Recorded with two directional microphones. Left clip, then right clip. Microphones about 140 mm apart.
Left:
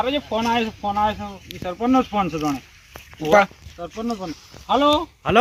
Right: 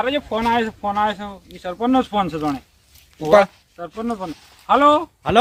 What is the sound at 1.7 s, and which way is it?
Speech, 15° right (ahead or behind).